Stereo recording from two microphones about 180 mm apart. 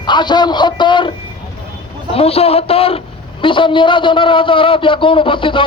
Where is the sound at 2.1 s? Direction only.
35° left (ahead or behind).